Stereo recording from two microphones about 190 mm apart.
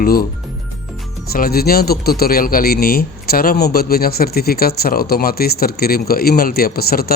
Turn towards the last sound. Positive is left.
turn(degrees=55)  # may be behind; listen again after turning